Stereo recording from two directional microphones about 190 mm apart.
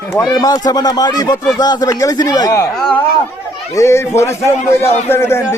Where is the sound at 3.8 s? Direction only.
15° left (ahead or behind).